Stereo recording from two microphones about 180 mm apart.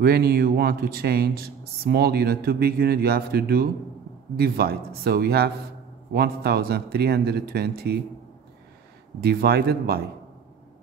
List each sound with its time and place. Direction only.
0.0 s speech: 60° right (ahead or behind)
9.2 s speech: 60° right (ahead or behind)